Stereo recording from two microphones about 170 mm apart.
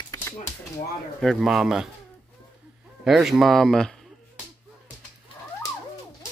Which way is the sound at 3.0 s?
Centre (ahead or behind).